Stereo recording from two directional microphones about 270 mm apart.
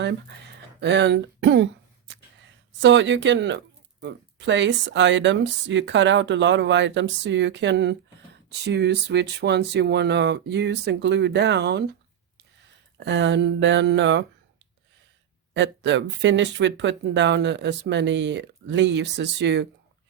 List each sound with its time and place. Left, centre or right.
0.0 s a sound: right
2.8 s speech: right
13.0 s speech: right
15.5 s speech: right